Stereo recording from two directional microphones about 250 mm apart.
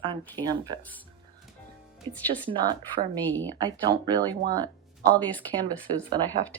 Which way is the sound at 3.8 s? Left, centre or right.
Centre.